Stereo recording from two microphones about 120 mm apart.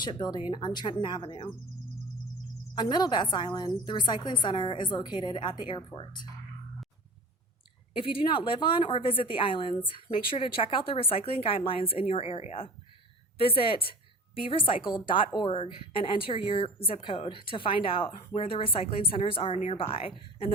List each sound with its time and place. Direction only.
0.0 s a woman's voice: 40° left (ahead or behind)
2.7 s a woman's voice: 40° left (ahead or behind)
7.9 s a woman's voice: 45° left (ahead or behind)